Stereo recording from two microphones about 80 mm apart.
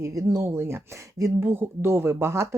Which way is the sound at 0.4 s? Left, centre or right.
Right.